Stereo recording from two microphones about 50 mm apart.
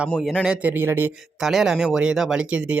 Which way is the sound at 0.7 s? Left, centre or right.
Right.